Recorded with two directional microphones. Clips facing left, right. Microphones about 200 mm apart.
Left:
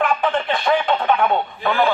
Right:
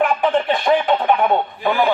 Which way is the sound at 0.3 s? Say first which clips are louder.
Right 3 dB; 15° right (ahead or behind).